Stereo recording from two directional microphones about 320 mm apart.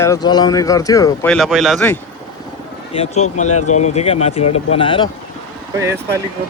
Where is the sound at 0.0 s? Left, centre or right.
Centre.